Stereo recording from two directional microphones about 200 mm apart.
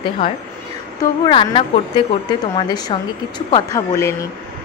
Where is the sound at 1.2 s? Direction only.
25° left (ahead or behind).